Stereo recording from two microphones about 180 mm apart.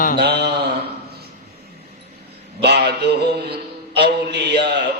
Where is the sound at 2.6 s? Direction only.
65° right (ahead or behind).